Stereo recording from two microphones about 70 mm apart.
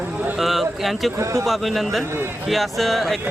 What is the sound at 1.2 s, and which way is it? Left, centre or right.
Speech, right.